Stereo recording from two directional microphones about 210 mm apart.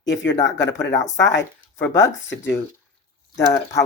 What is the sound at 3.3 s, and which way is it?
Speech, 15° left (ahead or behind).